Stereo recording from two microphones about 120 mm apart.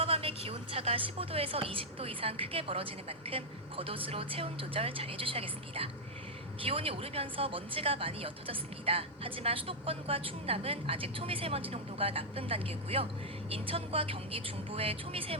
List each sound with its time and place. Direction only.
0.0 s a woman's voice: 50° right (ahead or behind)